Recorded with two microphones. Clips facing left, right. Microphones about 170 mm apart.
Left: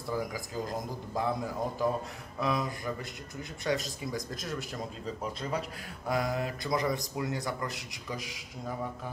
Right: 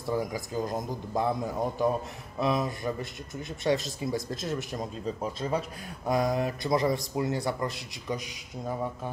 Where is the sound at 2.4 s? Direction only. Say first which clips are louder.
Right 4 dB; 25° right (ahead or behind).